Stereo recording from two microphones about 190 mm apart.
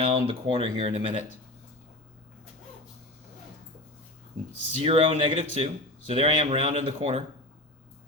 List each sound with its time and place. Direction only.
0.0 s speech: 30° right (ahead or behind)
4.8 s speech: 30° right (ahead or behind)